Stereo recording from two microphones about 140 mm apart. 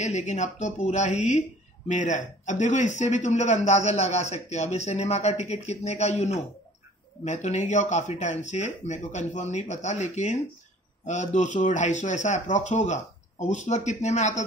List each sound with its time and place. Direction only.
0.0 s a man's voice: 60° left (ahead or behind)